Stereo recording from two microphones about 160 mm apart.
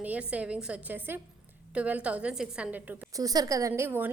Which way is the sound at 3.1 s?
25° right (ahead or behind).